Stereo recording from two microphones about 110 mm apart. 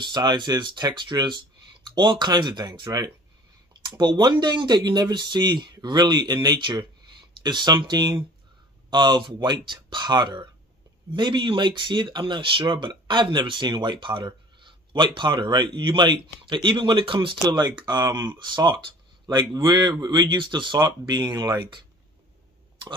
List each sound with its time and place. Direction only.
0.0 s speech: 40° right (ahead or behind)